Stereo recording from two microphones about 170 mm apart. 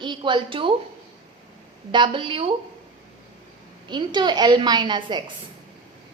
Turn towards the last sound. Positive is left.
turn(degrees=-25)  # may be behind; listen again after turning